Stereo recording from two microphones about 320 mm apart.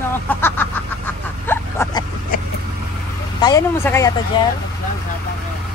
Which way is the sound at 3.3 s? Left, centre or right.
Centre.